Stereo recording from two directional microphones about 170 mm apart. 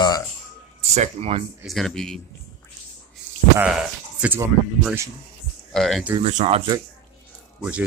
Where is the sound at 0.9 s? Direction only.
40° right (ahead or behind).